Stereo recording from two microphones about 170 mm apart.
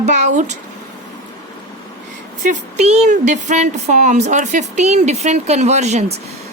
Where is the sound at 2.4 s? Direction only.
45° right (ahead or behind).